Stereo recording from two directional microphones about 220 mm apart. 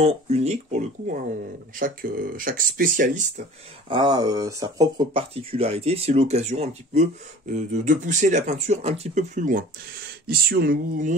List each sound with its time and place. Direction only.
0.0 s speech: 30° right (ahead or behind)
3.9 s speech: 20° right (ahead or behind); by 11.1 s 40° right (ahead or behind)